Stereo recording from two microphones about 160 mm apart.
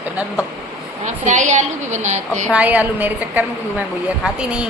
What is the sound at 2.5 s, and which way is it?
A woman's voice, 10° right (ahead or behind).